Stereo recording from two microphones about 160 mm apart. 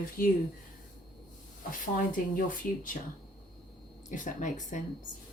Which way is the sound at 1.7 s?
60° left (ahead or behind).